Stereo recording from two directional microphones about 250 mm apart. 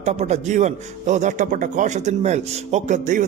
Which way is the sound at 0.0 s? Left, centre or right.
Right.